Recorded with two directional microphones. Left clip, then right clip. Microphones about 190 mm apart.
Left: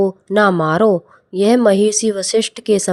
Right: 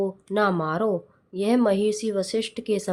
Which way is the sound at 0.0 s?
40° left (ahead or behind).